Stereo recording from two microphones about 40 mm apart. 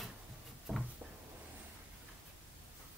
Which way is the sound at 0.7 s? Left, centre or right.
Centre.